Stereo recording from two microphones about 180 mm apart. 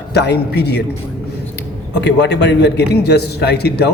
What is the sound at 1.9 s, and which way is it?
A man's voice, 70° left (ahead or behind).